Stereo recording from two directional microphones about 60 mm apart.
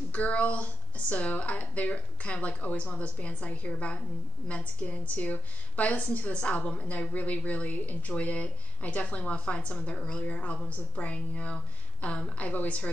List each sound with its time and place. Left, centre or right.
0.1 s speech: left